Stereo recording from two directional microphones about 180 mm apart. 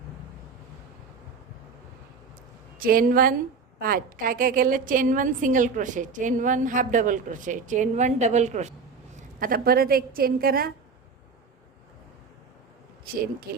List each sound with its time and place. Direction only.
2.7 s a woman's voice: 50° right (ahead or behind)
9.1 s a woman's voice: 50° right (ahead or behind)